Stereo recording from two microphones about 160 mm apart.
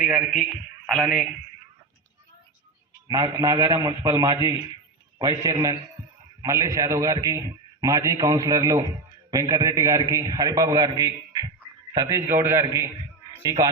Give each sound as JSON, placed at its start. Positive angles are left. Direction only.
{"t": 0.0, "sound": "a man's voice", "side_deg": -5}
{"t": 3.1, "sound": "a man's voice", "side_deg": -25}
{"t": 6.0, "sound": "a sound", "side_deg": -15}
{"t": 6.4, "sound": "a man's voice", "side_deg": -20}